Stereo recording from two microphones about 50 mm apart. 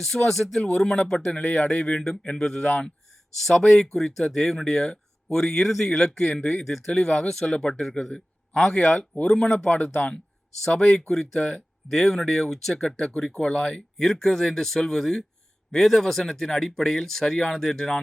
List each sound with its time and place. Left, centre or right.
0.0 s speech: centre
3.1 s a sound: centre
3.6 s speech: centre
6.3 s speech: left
6.7 s speech: centre
6.9 s speech: centre
8.7 s speech: centre
9.6 s speech: left
10.7 s speech: centre
13.5 s speech: left